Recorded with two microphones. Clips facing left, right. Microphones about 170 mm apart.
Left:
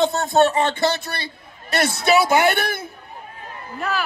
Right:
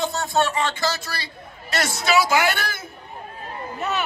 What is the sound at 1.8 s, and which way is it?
Speech, 60° left (ahead or behind).